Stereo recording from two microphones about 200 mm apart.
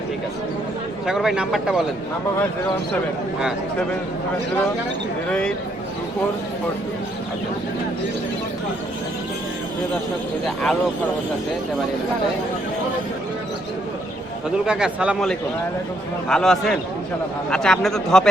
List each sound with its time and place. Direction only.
1.0 s speech: centre (ahead or behind)
10.4 s speech: 5° left (ahead or behind)
14.7 s speech: 5° right (ahead or behind)